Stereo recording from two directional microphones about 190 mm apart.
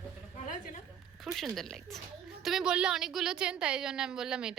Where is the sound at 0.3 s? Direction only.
45° left (ahead or behind).